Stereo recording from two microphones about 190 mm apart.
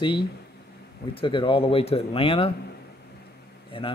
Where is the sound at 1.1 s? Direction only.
25° left (ahead or behind).